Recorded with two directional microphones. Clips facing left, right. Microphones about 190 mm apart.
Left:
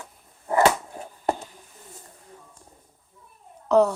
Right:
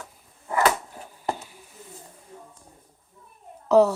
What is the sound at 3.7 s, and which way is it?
Speech, 5° right (ahead or behind).